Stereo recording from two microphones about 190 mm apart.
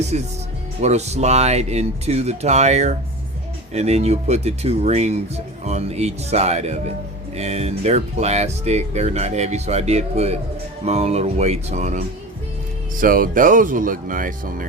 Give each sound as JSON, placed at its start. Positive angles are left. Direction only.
{"t": 0.1, "sound": "speech", "side_deg": -40}